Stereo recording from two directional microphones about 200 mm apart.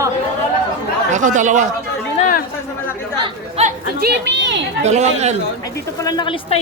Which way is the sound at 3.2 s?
30° right (ahead or behind).